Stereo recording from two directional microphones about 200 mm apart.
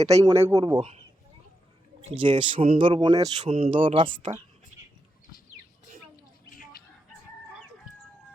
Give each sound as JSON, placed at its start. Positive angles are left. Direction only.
{"t": 0.0, "sound": "a man's voice", "side_deg": -15}
{"t": 2.1, "sound": "speech", "side_deg": -25}
{"t": 4.2, "sound": "speech", "side_deg": -40}